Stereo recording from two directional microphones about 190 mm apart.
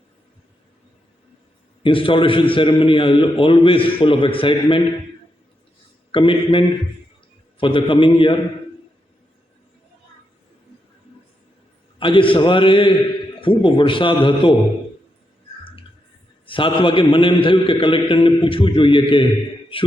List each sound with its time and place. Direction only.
1.8 s a man's voice: 30° left (ahead or behind)
6.1 s a man's voice: 25° left (ahead or behind)
11.9 s a man's voice: 25° left (ahead or behind)
16.5 s a man's voice: 25° left (ahead or behind)